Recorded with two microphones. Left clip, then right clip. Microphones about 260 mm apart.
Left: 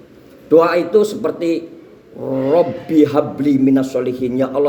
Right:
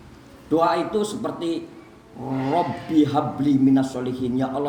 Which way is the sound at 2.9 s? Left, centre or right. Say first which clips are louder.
Left 6 dB; centre.